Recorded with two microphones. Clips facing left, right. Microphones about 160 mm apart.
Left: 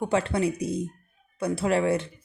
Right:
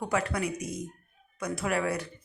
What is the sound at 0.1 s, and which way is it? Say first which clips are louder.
Speech: left 4 dB; 30° left (ahead or behind).